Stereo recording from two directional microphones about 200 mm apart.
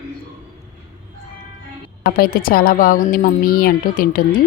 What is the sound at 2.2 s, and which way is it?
A woman's voice, 50° left (ahead or behind).